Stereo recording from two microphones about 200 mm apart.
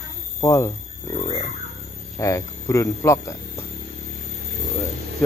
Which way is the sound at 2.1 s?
15° left (ahead or behind).